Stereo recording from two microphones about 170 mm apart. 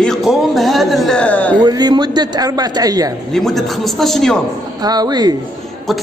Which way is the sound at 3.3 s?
Centre (ahead or behind).